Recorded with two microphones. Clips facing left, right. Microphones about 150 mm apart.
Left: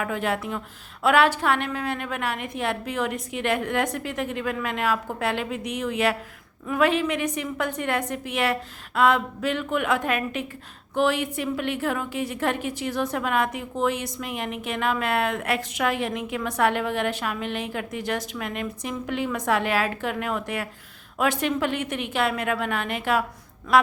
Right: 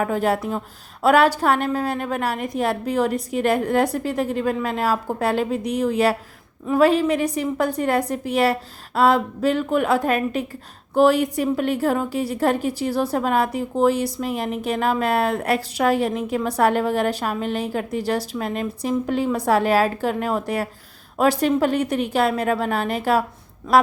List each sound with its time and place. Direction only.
0.0 s a woman's voice: 35° right (ahead or behind)